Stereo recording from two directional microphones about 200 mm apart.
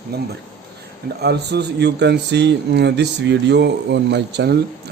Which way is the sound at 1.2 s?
55° right (ahead or behind).